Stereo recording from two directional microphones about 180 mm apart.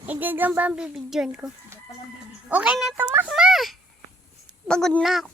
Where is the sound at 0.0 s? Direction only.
10° right (ahead or behind).